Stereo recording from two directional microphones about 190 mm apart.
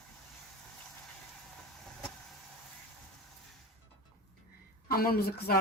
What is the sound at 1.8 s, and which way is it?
Vehicle, centre (ahead or behind).